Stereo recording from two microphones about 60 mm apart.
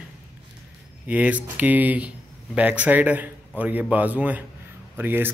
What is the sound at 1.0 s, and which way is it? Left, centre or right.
Speech, right.